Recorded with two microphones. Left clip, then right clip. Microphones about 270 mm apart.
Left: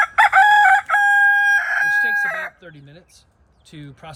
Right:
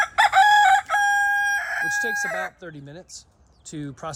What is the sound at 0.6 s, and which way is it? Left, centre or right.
Crowing, centre.